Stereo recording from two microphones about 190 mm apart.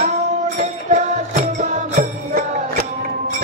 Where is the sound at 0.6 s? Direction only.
40° right (ahead or behind).